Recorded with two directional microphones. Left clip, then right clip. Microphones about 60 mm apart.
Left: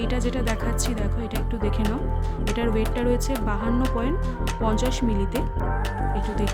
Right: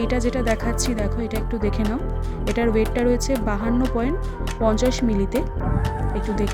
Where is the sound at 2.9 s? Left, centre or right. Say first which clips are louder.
Right 4 dB; right.